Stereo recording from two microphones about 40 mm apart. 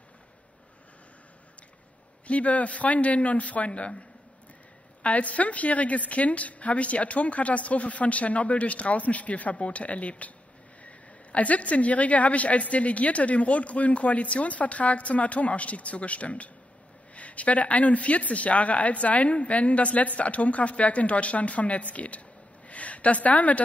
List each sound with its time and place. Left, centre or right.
2.2 s a woman's voice: left
5.0 s a woman's voice: left